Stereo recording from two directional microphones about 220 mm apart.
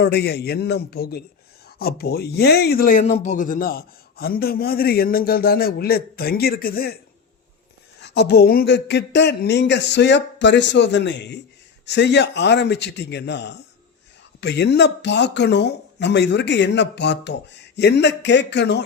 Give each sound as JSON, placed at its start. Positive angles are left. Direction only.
{"t": 0.0, "sound": "speech", "side_deg": 50}
{"t": 8.0, "sound": "speech", "side_deg": 50}